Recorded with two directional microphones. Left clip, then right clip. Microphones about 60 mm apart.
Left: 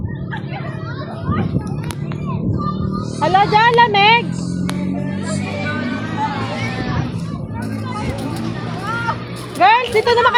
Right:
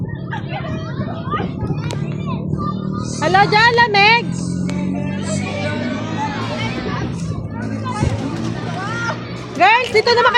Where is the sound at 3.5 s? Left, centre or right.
Right.